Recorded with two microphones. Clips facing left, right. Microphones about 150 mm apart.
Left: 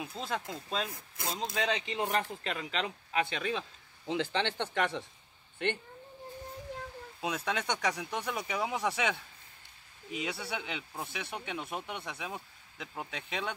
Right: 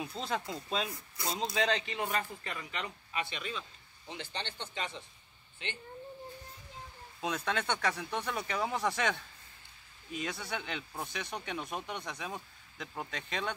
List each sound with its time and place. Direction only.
0.0 s speech: centre (ahead or behind)
2.2 s speech: 80° left
5.6 s speech: 55° left (ahead or behind)
7.2 s speech: 10° left (ahead or behind)